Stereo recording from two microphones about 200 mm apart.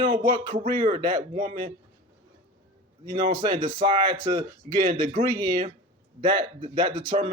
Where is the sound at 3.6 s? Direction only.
25° right (ahead or behind).